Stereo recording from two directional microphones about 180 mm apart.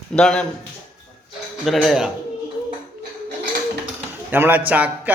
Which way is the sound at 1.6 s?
Centre (ahead or behind).